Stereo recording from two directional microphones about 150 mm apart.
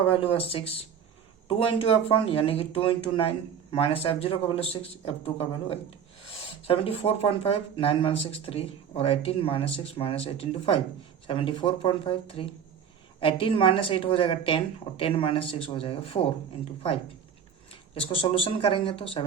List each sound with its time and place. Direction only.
0.1 s speech: 40° left (ahead or behind)